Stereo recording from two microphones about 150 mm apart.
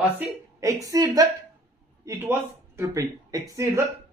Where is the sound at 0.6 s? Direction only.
20° right (ahead or behind).